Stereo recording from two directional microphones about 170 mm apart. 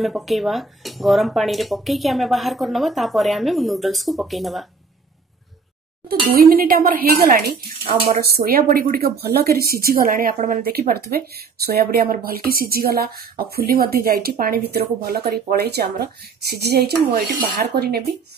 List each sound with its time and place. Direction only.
0.0 s speech: centre (ahead or behind)
6.0 s speech: 60° right (ahead or behind)